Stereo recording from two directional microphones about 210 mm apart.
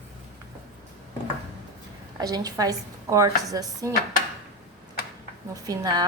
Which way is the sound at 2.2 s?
20° right (ahead or behind).